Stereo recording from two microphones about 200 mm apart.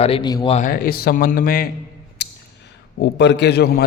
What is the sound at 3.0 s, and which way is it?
Speech, 60° left (ahead or behind).